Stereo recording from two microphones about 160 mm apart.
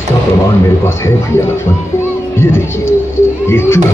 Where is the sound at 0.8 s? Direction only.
15° left (ahead or behind).